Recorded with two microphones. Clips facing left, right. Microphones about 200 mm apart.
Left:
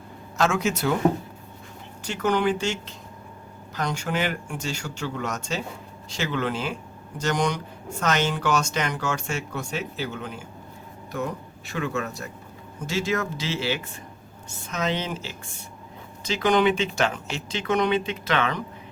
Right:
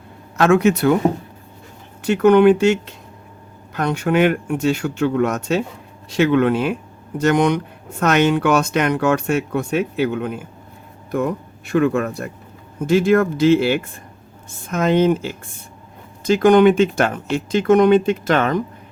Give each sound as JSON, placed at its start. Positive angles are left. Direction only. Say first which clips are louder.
{"t": 0.3, "sound": "speech", "louder": "right 9 dB", "side_deg": -60}
{"t": 2.0, "sound": "speech", "louder": "right 12 dB", "side_deg": -60}
{"t": 3.8, "sound": "speech", "louder": "right 10 dB", "side_deg": -60}